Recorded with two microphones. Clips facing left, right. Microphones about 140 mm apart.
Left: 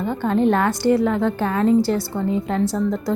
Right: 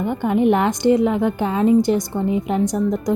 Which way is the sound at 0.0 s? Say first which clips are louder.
Right 1 dB; 15° right (ahead or behind).